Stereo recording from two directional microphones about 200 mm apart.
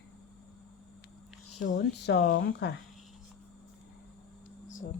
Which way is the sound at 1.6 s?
40° left (ahead or behind).